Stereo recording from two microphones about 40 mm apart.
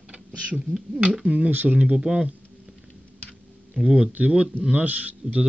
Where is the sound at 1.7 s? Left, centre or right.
Right.